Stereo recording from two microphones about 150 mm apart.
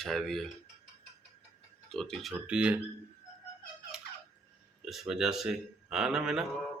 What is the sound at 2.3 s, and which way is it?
Speech, 10° right (ahead or behind).